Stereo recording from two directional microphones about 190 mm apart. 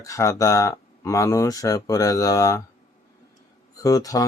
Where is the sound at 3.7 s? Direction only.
20° left (ahead or behind).